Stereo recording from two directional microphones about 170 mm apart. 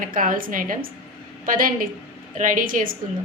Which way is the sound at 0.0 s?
50° right (ahead or behind).